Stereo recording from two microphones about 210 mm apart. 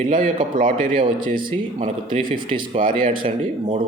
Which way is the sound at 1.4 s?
25° right (ahead or behind).